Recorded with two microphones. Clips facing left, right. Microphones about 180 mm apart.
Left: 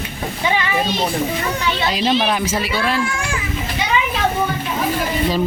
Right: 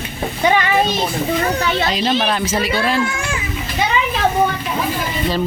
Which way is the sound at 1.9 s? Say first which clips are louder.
Even; 5° left (ahead or behind).